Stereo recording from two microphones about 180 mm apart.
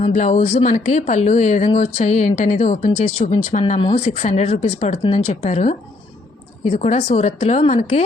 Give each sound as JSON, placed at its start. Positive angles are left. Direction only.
{"t": 0.1, "sound": "speech", "side_deg": 45}
{"t": 3.8, "sound": "speech", "side_deg": 30}